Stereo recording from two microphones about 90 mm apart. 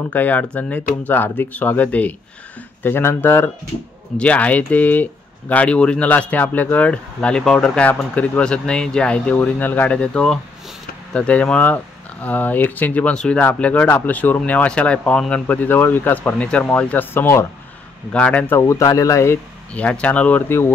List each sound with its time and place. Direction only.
0.1 s speech: 20° left (ahead or behind)
4.2 s speech: 15° left (ahead or behind)
18.1 s speech: 15° left (ahead or behind)
18.6 s a man's voice: 35° left (ahead or behind)
19.7 s speech: 15° left (ahead or behind)